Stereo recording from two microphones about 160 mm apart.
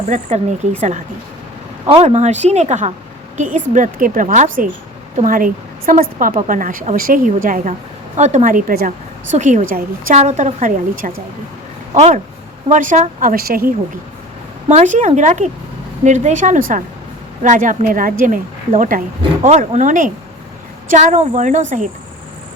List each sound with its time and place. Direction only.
0.1 s a woman's voice: 45° right (ahead or behind); by 8.9 s 65° right (ahead or behind)
9.3 s speech: 50° right (ahead or behind)
10.2 s speech: 45° right (ahead or behind)
11.9 s a woman's voice: 45° right (ahead or behind); by 13.7 s 65° right (ahead or behind)
14.7 s a woman's voice: 50° right (ahead or behind)